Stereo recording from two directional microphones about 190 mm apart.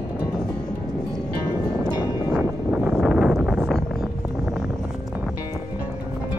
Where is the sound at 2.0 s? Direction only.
20° left (ahead or behind).